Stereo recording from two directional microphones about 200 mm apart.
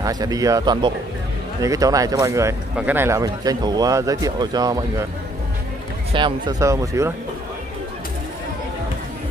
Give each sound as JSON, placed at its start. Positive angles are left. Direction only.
{"t": 0.0, "sound": "speech", "side_deg": -20}
{"t": 6.1, "sound": "speech", "side_deg": -25}